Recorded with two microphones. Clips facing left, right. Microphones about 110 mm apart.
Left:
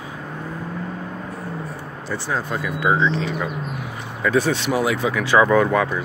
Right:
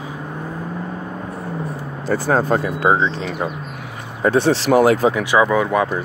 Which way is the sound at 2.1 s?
45° right (ahead or behind).